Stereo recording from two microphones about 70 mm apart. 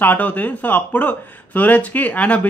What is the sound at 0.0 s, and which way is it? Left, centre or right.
Speech, left.